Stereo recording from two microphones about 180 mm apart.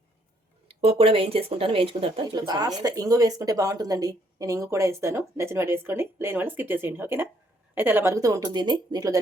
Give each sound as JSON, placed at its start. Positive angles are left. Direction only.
{"t": 0.7, "sound": "speech", "side_deg": -30}